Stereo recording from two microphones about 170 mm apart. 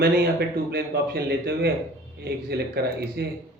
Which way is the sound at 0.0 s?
70° right (ahead or behind).